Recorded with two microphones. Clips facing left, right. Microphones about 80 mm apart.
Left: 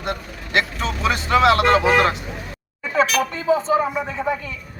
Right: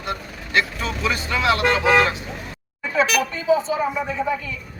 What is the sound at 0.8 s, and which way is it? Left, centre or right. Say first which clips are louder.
Speech: left 2 dB; left.